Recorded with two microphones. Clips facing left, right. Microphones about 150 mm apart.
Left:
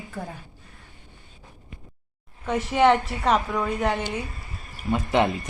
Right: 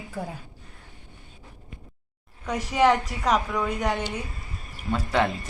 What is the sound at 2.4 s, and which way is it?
A woman's voice, 5° left (ahead or behind).